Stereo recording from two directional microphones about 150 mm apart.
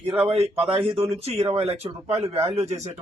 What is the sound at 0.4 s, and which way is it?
A man's voice, 40° right (ahead or behind).